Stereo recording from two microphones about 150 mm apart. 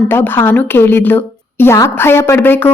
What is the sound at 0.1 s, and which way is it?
A woman's voice, 15° left (ahead or behind).